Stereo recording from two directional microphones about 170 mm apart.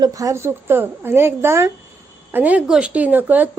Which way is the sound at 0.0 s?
20° right (ahead or behind).